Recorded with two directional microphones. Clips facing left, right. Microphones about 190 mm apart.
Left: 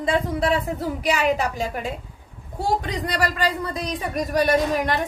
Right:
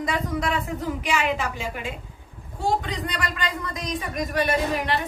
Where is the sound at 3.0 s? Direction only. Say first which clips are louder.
Left 6 dB; 35° left (ahead or behind).